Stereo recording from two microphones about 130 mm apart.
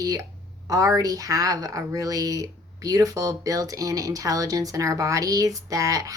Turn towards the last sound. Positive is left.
turn(degrees=-25)  # may be behind; listen again after turning